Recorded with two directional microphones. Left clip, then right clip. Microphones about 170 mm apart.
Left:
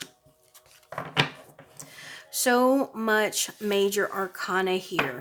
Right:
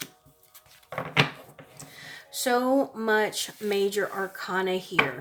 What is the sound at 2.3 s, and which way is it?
Speech, 35° left (ahead or behind).